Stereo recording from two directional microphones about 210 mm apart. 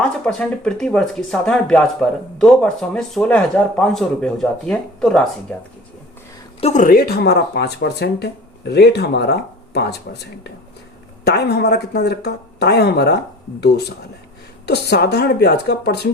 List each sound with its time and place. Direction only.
0.0 s speech: 5° left (ahead or behind)
6.6 s speech: 35° left (ahead or behind); by 10.0 s 50° left (ahead or behind)
11.3 s speech: 50° left (ahead or behind)